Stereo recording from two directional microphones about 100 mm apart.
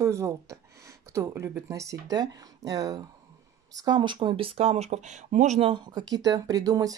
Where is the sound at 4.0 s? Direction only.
55° right (ahead or behind); by 5.0 s 90° right.